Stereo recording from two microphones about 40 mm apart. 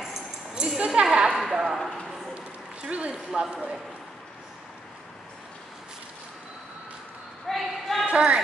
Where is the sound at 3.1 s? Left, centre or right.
Centre.